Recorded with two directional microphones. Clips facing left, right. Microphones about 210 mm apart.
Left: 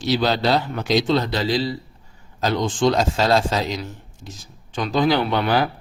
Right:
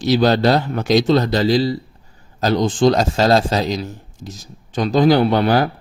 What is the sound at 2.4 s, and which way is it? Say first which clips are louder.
Mantra: right 4 dB; 40° right (ahead or behind).